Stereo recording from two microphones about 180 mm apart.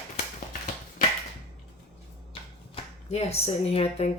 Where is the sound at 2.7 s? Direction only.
35° left (ahead or behind).